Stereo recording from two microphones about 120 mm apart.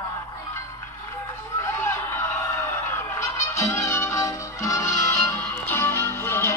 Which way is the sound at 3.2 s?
20° left (ahead or behind).